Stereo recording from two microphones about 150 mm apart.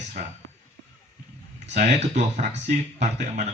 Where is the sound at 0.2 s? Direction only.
75° right (ahead or behind).